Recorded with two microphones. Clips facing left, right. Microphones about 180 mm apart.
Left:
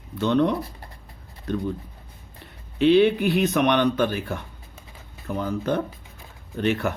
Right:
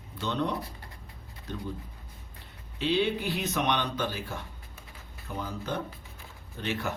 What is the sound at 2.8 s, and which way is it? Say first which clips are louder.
A man's voice: left 11 dB; 60° left (ahead or behind).